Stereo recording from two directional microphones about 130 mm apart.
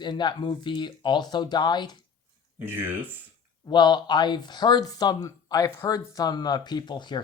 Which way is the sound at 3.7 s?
35° left (ahead or behind).